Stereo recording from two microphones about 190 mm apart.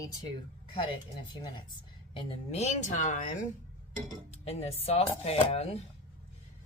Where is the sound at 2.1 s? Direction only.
30° left (ahead or behind).